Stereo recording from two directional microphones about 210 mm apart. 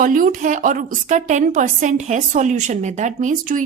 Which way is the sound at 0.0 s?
40° right (ahead or behind).